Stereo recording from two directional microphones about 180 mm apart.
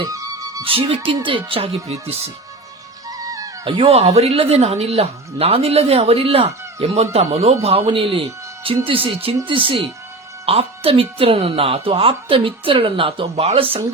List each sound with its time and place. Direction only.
0.1 s speech: 20° right (ahead or behind); by 2.3 s 35° right (ahead or behind)
3.1 s a woman's voice: 20° right (ahead or behind)